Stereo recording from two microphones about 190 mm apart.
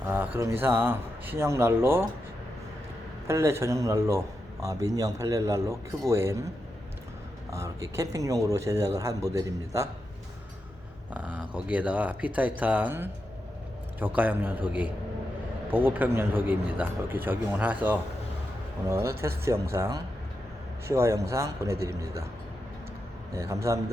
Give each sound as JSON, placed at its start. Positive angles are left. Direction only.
{"t": 0.0, "sound": "a sound", "side_deg": -10}
{"t": 0.3, "sound": "speech", "side_deg": -15}
{"t": 3.2, "sound": "speech", "side_deg": -15}
{"t": 7.5, "sound": "speech", "side_deg": -15}
{"t": 11.1, "sound": "speech", "side_deg": -10}
{"t": 14.2, "sound": "speech", "side_deg": -10}
{"t": 15.7, "sound": "speech", "side_deg": -10}
{"t": 23.3, "sound": "speech", "side_deg": -15}